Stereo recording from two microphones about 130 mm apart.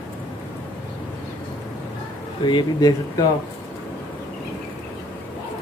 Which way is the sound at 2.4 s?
30° left (ahead or behind).